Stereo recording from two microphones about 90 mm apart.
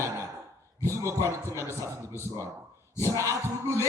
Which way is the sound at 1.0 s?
35° right (ahead or behind).